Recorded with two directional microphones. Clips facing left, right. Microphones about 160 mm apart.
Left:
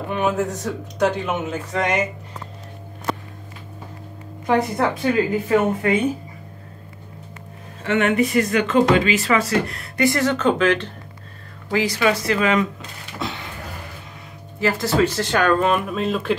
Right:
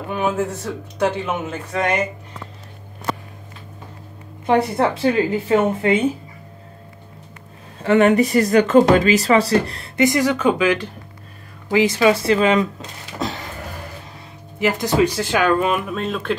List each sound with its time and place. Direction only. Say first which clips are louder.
0.1 s speech: even; centre (ahead or behind)
4.5 s speech: right 2 dB; 25° right (ahead or behind)
7.8 s speech: right 5 dB; 35° right (ahead or behind)
10.0 s speech: right 1 dB; 15° right (ahead or behind)
11.7 s speech: right 4 dB; 20° right (ahead or behind)
13.2 s a sound: right 3 dB; 40° right (ahead or behind)
14.6 s speech: right 2 dB; 15° right (ahead or behind); by 16.3 s 5° left (ahead or behind)